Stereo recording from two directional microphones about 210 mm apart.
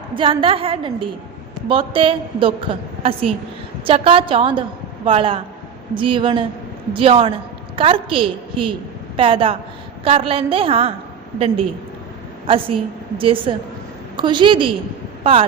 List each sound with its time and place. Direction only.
0.1 s a woman's voice: 25° right (ahead or behind)